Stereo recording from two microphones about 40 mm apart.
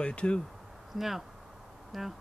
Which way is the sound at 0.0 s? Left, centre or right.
Left.